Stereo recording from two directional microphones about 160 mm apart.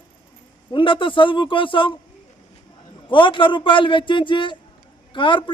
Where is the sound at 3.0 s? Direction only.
30° left (ahead or behind).